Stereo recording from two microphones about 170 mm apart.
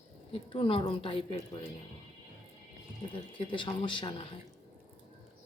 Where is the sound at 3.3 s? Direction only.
30° left (ahead or behind).